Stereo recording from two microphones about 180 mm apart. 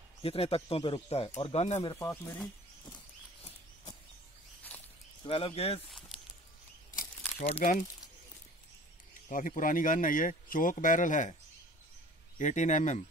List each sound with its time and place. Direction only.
0.2 s speech: 30° left (ahead or behind); by 2.4 s 15° left (ahead or behind)
5.2 s speech: 30° left (ahead or behind)
5.9 s a sound: centre (ahead or behind)
7.3 s speech: 35° left (ahead or behind)
9.3 s speech: 45° left (ahead or behind)
12.4 s speech: 45° left (ahead or behind)